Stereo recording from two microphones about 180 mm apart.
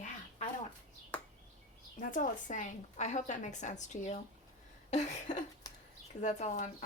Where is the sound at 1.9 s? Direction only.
45° left (ahead or behind).